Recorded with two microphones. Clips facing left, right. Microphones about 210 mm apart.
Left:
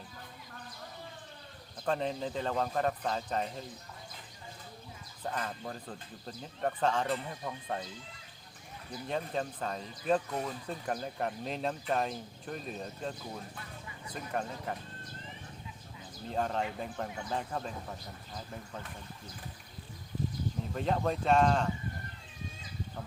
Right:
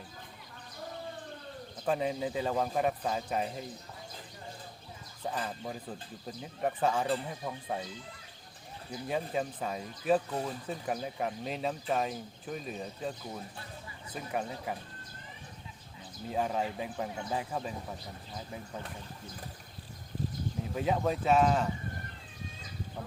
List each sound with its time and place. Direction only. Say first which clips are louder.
1.8 s speech: right 2 dB; 5° right (ahead or behind)
5.2 s speech: right 1 dB; 5° right (ahead or behind)
9.0 s speech: right 2 dB; 5° right (ahead or behind)
14.3 s speech: right 1 dB; 5° right (ahead or behind)
16.3 s speech: right 1 dB; 5° right (ahead or behind)
20.7 s speech: right 2 dB; 5° right (ahead or behind)